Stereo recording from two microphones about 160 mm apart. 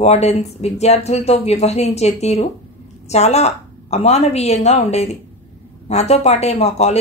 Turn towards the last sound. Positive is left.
turn(degrees=40)  # may be behind; listen again after turning